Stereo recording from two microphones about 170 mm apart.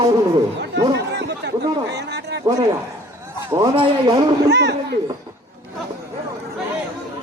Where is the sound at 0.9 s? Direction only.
80° right.